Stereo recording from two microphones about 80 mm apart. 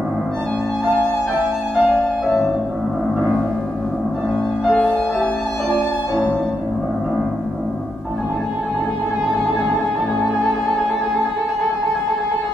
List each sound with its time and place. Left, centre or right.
1.4 s music: right